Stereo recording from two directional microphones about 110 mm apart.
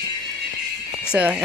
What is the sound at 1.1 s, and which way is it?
Speech, 10° right (ahead or behind).